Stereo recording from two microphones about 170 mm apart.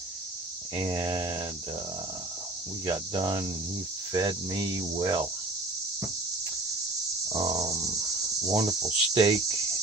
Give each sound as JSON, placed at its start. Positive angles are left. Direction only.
{"t": 0.8, "sound": "cricket", "side_deg": -25}
{"t": 2.8, "sound": "cricket", "side_deg": -25}
{"t": 7.3, "sound": "a sound", "side_deg": -20}
{"t": 8.4, "sound": "cricket", "side_deg": -20}